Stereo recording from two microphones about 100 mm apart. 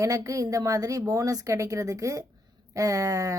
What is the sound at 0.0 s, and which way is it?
A woman's voice, 35° right (ahead or behind).